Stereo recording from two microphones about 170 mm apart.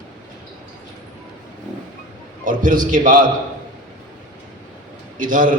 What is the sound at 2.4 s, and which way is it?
Speech, 50° right (ahead or behind).